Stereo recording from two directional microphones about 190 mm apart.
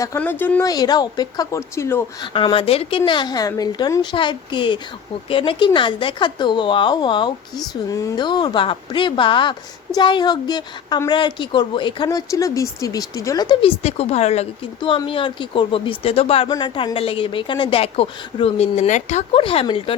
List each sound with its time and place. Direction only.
0.0 s speech: 15° left (ahead or behind)
0.7 s speech: 20° left (ahead or behind)
2.2 s speech: 25° left (ahead or behind)